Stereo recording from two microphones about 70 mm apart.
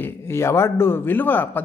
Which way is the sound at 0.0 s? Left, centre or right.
Left.